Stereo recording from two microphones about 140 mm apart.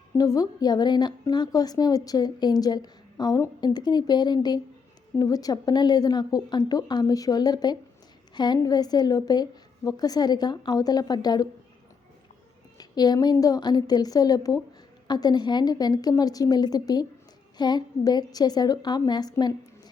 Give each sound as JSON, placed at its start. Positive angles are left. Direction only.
{"t": 0.2, "sound": "a woman's voice", "side_deg": 25}
{"t": 12.7, "sound": "a woman's voice", "side_deg": 30}